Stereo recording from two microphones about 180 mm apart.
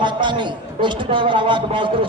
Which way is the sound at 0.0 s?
25° right (ahead or behind).